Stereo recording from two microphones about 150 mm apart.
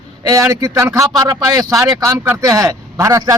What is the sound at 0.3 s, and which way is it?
A man's voice, 20° right (ahead or behind).